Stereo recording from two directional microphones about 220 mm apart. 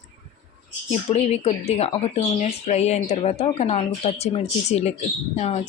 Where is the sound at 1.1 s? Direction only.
30° left (ahead or behind).